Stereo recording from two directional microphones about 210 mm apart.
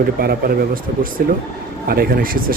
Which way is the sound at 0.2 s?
45° right (ahead or behind).